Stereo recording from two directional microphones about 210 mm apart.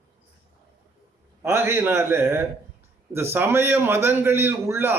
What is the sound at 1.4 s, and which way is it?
A man's voice, 10° right (ahead or behind).